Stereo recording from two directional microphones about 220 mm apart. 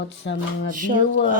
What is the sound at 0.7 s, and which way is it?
Speech, 35° right (ahead or behind).